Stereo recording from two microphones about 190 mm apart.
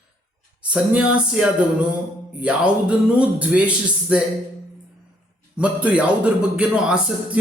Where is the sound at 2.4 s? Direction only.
5° right (ahead or behind).